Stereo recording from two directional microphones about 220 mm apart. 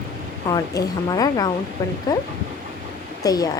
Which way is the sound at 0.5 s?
15° left (ahead or behind).